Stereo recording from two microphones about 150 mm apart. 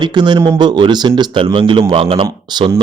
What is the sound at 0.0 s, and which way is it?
Speech, 30° right (ahead or behind).